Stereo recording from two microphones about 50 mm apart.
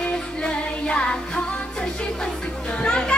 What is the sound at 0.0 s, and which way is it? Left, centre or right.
Music, left.